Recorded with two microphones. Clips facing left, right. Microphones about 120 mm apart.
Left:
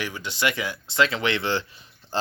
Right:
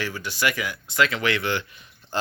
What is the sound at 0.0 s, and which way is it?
Speech, 20° left (ahead or behind).